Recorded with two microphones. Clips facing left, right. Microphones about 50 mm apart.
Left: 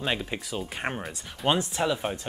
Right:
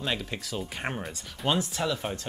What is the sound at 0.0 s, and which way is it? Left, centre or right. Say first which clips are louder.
Speech: left 2 dB; centre.